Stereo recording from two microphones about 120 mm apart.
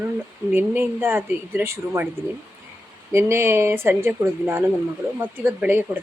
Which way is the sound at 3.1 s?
20° right (ahead or behind).